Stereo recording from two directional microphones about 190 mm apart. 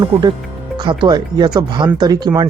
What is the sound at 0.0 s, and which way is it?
Speech, 25° right (ahead or behind).